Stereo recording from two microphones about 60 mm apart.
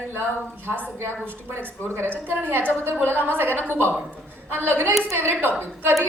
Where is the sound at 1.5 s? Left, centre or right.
Right.